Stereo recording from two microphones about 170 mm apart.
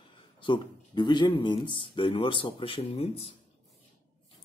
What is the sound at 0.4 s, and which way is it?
Speech, 30° left (ahead or behind).